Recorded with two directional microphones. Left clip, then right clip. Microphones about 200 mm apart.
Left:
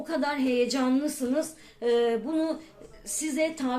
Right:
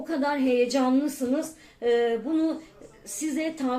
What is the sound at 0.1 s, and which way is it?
Speech, 35° left (ahead or behind).